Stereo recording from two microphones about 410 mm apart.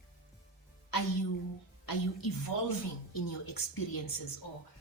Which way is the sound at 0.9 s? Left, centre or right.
Left.